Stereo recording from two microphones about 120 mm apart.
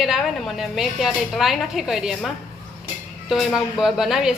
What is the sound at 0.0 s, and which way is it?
A woman's voice, centre (ahead or behind).